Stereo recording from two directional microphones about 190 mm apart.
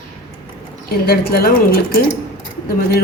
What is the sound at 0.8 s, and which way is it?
Speech, 55° left (ahead or behind).